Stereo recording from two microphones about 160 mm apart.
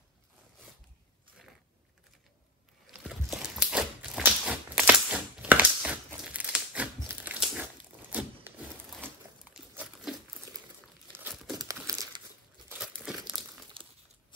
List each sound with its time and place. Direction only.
2.9 s a sound: 5° right (ahead or behind)
11.5 s crumpling: 20° right (ahead or behind)
12.7 s crumpling: 5° right (ahead or behind)
13.8 s crumpling: 35° right (ahead or behind)